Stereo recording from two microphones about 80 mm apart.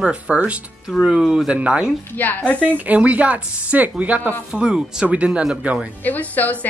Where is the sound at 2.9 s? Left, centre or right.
Centre.